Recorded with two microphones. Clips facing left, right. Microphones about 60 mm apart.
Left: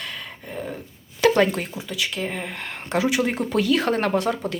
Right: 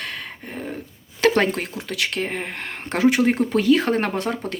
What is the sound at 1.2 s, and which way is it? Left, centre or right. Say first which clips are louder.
Speech: even; right.